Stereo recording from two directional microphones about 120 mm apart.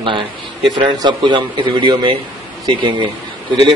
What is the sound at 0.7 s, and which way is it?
A man's voice, 40° right (ahead or behind).